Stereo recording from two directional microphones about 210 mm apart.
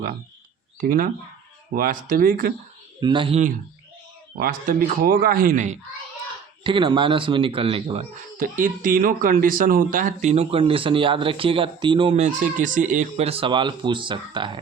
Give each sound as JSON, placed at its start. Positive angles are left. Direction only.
{"t": 0.8, "sound": "speech", "side_deg": -45}
{"t": 3.0, "sound": "speech", "side_deg": -20}
{"t": 4.4, "sound": "speech", "side_deg": -45}
{"t": 6.7, "sound": "speech", "side_deg": -25}
{"t": 8.4, "sound": "speech", "side_deg": -40}